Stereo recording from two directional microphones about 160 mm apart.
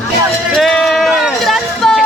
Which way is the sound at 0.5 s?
Centre (ahead or behind).